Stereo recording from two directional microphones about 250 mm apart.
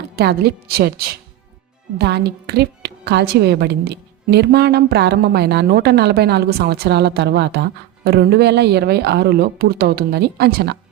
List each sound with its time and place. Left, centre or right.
0.2 s a woman's voice: right